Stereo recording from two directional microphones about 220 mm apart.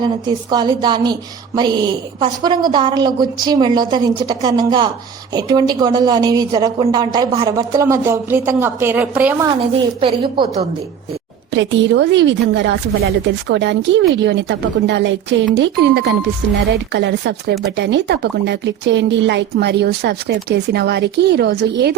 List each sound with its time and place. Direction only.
0.0 s a woman's voice: 20° right (ahead or behind)
9.6 s a woman's voice: 25° right (ahead or behind)
11.5 s speech: 55° right (ahead or behind)